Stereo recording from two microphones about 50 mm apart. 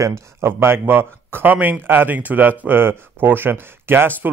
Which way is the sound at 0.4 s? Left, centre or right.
Right.